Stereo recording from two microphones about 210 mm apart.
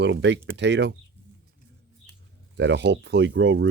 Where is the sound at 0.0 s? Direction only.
55° right (ahead or behind).